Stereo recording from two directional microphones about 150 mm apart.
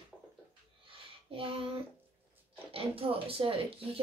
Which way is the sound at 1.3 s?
40° right (ahead or behind).